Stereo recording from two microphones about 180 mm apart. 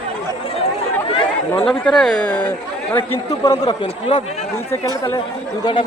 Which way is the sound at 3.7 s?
30° left (ahead or behind).